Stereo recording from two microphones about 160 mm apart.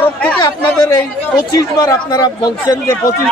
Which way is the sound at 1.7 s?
20° left (ahead or behind).